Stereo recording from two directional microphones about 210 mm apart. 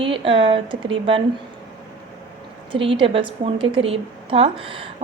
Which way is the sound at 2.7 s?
25° right (ahead or behind).